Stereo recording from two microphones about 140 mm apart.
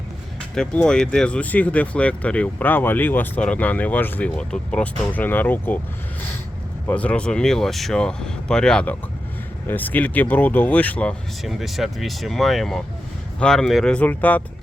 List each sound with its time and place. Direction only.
0.5 s speech: 5° left (ahead or behind)
6.8 s speech: 10° left (ahead or behind)
11.4 s speech: centre (ahead or behind)